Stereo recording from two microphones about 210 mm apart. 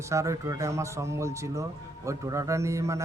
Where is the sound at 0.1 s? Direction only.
15° right (ahead or behind).